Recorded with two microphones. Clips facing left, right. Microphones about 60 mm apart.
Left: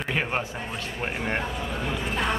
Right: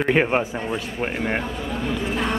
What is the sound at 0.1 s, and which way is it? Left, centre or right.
Speech, right.